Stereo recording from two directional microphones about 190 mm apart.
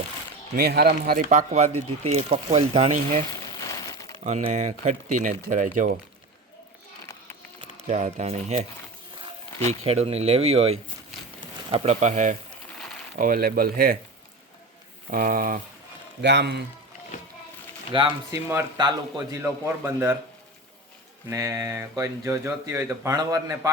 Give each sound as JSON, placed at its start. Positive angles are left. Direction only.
{"t": 0.5, "sound": "a man's voice", "side_deg": -55}
{"t": 1.3, "sound": "speech", "side_deg": -40}
{"t": 3.7, "sound": "crumpling", "side_deg": 20}
{"t": 4.2, "sound": "speech", "side_deg": -40}
{"t": 7.9, "sound": "speech", "side_deg": -40}
{"t": 9.8, "sound": "speech", "side_deg": -30}
{"t": 15.1, "sound": "speech", "side_deg": -50}
{"t": 16.2, "sound": "a man's voice", "side_deg": -65}
{"t": 17.1, "sound": "a sound", "side_deg": 40}
{"t": 17.9, "sound": "a man's voice", "side_deg": -25}
{"t": 21.2, "sound": "speech", "side_deg": -15}